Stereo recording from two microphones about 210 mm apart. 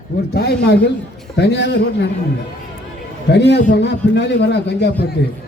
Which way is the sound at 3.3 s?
55° left (ahead or behind).